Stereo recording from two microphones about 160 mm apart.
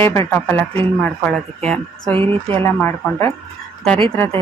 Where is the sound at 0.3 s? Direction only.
10° left (ahead or behind).